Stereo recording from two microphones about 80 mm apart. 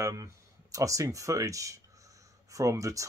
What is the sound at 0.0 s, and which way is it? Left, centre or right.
Speech, right.